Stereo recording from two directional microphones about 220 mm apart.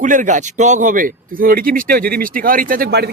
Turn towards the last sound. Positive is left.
turn(degrees=-45)  # may be behind; listen again after turning